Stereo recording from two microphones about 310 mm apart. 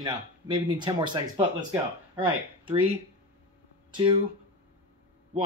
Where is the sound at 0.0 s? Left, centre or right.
Centre.